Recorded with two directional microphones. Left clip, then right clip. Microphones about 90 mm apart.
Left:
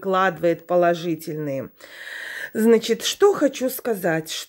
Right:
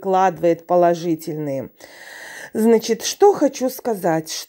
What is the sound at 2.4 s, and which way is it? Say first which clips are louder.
Speech: right 1 dB; 30° right (ahead or behind).